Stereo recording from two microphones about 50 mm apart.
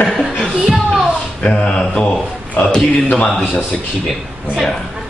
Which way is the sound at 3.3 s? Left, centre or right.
Centre.